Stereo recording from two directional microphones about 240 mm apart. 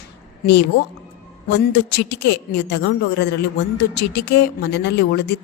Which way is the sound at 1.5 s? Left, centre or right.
Left.